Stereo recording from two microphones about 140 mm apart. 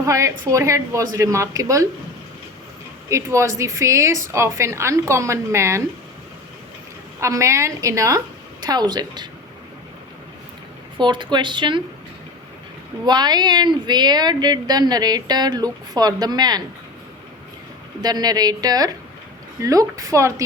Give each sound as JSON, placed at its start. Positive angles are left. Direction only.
{"t": 0.0, "sound": "speech", "side_deg": -20}
{"t": 3.1, "sound": "speech", "side_deg": -20}
{"t": 7.2, "sound": "speech", "side_deg": -20}
{"t": 10.9, "sound": "speech", "side_deg": -35}
{"t": 13.1, "sound": "speech", "side_deg": -30}
{"t": 18.0, "sound": "speech", "side_deg": -30}